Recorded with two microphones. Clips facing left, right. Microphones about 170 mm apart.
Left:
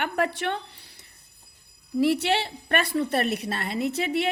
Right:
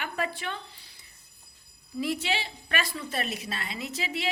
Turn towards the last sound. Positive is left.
turn(degrees=60)  # may be behind; listen again after turning